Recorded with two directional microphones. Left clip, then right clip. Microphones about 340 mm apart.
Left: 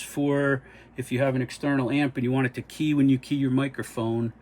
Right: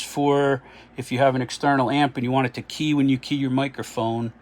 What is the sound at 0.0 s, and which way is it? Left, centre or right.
Speech, centre.